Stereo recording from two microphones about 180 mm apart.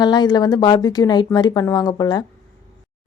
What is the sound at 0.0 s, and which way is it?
A woman's voice, 25° left (ahead or behind).